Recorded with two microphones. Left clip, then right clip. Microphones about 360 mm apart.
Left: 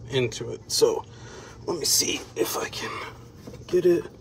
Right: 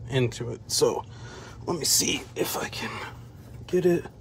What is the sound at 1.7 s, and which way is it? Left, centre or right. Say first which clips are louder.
Speech: left 1 dB; right.